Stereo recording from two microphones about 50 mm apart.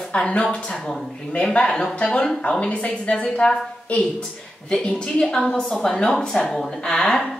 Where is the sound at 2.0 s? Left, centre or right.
Centre.